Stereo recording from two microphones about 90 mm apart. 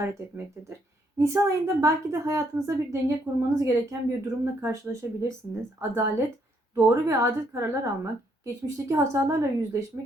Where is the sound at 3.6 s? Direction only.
35° right (ahead or behind).